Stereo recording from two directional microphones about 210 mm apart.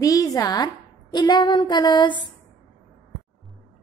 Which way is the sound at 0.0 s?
15° left (ahead or behind).